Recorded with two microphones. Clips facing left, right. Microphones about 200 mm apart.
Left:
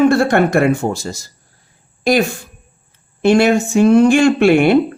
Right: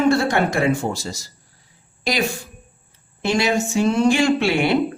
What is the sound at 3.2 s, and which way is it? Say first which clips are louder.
Speech: left 8 dB; 55° left (ahead or behind).